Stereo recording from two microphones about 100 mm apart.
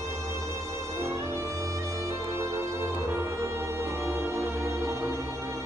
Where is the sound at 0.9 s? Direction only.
30° right (ahead or behind).